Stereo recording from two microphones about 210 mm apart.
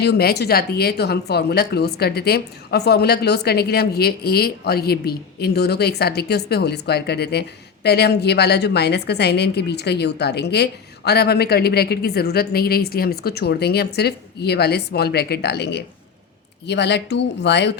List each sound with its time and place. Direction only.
0.0 s a woman's voice: 50° left (ahead or behind)